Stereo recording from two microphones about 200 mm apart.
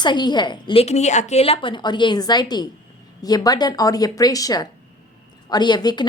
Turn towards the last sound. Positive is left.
turn(degrees=20)  # may be behind; listen again after turning